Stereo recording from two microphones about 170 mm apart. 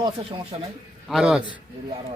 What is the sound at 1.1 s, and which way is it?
Speech, 5° right (ahead or behind).